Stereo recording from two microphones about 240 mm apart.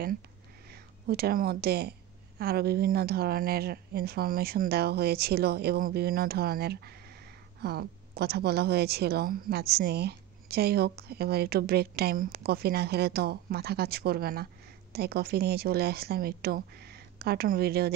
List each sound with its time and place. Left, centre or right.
0.7 s a woman's voice: right